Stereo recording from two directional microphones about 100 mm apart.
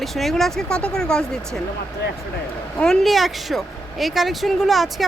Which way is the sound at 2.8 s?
5° left (ahead or behind).